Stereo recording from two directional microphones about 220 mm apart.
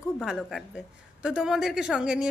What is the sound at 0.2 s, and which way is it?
Speech, centre (ahead or behind).